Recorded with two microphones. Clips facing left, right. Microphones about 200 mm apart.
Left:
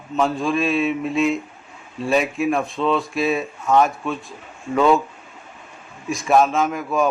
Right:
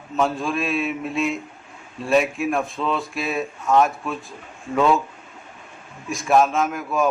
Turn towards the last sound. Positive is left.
turn(degrees=0)  # may be behind; listen again after turning